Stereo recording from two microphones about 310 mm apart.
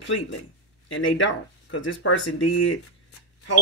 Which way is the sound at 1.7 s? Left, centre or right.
Left.